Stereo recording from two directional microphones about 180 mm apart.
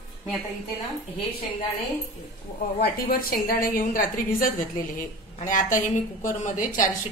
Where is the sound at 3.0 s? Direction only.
55° left (ahead or behind).